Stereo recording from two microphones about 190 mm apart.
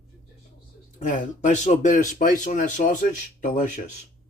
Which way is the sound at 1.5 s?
40° left (ahead or behind).